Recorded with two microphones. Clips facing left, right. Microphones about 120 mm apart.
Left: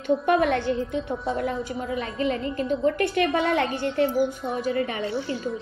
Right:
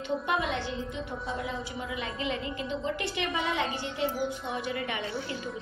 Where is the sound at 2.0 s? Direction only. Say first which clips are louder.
Left 7 dB; 45° left (ahead or behind).